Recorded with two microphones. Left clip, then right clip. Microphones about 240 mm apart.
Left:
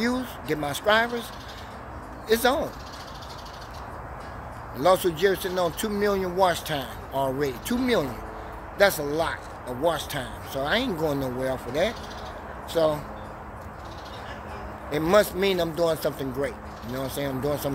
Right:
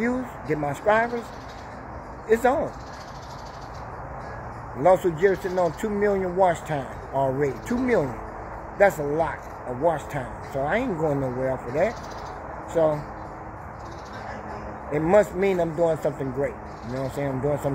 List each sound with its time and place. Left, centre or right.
0.0 s speech: centre
2.2 s speech: centre
4.8 s speech: centre
14.9 s speech: centre